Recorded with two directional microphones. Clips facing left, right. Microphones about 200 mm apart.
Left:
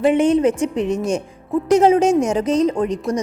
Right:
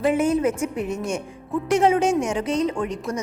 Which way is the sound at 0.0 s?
30° left (ahead or behind).